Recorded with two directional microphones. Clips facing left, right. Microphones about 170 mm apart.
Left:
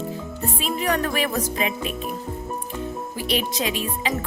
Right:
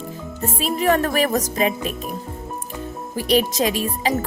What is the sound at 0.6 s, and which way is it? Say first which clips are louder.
Speech: right 5 dB; 40° right (ahead or behind).